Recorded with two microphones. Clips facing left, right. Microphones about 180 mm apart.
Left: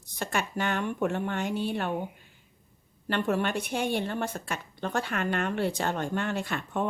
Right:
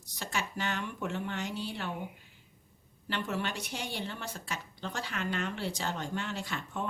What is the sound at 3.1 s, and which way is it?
Speech, 55° left (ahead or behind).